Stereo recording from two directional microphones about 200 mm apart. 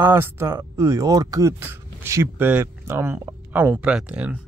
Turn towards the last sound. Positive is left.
turn(degrees=-5)  # may be behind; listen again after turning